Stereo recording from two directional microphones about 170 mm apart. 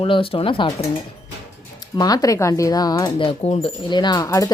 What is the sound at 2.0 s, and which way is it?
Speech, 20° left (ahead or behind).